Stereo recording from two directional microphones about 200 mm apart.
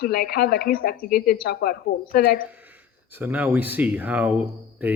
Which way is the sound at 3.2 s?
10° right (ahead or behind).